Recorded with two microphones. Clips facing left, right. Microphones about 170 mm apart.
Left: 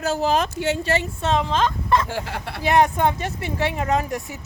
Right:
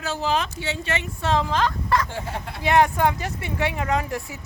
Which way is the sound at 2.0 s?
90° left.